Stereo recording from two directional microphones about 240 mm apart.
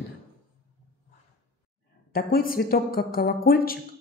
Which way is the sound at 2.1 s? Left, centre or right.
Left.